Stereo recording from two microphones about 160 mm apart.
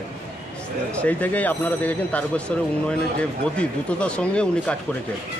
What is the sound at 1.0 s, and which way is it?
Speech, 10° left (ahead or behind).